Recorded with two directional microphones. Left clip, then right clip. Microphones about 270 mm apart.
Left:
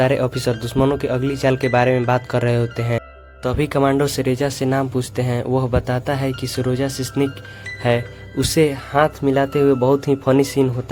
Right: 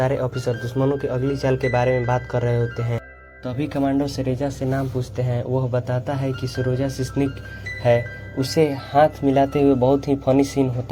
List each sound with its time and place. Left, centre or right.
0.0 s speech: left